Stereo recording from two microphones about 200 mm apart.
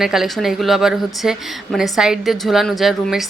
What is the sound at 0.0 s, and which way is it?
Speech, centre (ahead or behind).